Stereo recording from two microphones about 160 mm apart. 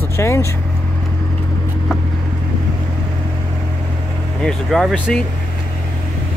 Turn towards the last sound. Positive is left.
turn(degrees=5)  # may be behind; listen again after turning